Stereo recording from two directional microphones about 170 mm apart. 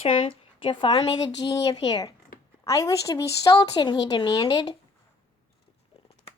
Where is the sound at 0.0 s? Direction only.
30° left (ahead or behind).